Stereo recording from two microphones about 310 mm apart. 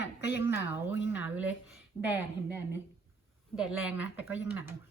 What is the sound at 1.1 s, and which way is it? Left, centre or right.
A woman's voice, centre.